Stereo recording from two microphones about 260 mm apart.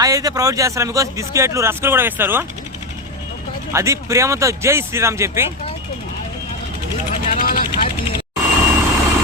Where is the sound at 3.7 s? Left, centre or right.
Centre.